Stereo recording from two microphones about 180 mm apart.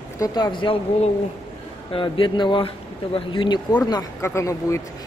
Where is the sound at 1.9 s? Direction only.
30° left (ahead or behind).